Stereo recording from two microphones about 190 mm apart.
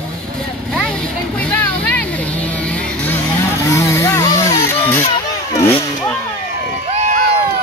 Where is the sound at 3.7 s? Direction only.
15° left (ahead or behind).